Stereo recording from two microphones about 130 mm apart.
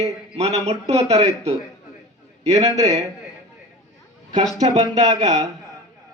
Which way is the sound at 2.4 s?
60° right (ahead or behind).